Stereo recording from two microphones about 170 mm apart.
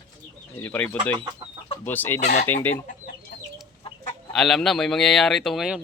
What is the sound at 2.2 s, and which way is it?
Speech, 45° left (ahead or behind).